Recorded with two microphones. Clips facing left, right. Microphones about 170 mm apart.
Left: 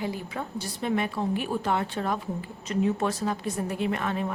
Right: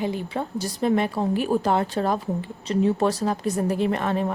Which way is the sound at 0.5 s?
40° right (ahead or behind).